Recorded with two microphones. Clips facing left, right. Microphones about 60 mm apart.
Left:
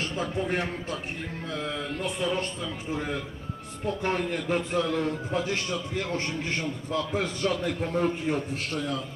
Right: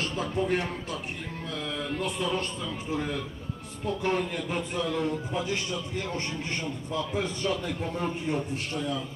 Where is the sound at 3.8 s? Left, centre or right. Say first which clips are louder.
Even; left.